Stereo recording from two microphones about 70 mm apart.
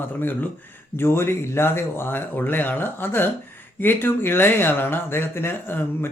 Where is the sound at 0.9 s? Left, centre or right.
Left.